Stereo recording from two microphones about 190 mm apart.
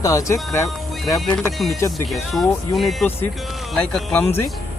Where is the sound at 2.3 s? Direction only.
Centre (ahead or behind).